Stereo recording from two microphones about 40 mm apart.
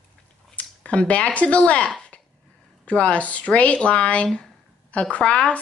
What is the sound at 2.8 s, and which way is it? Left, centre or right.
A woman's voice, left.